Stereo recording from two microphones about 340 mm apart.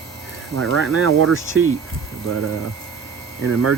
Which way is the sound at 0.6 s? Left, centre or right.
Right.